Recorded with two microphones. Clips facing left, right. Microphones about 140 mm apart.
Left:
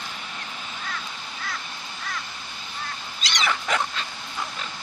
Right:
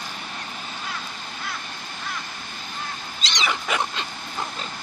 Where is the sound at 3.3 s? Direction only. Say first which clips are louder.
Even; 20° right (ahead or behind).